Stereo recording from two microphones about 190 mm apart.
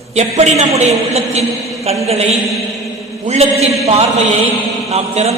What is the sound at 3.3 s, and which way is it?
Speech, 35° right (ahead or behind).